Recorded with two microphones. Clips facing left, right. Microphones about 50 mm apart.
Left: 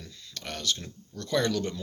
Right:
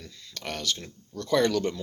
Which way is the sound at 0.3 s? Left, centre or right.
Right.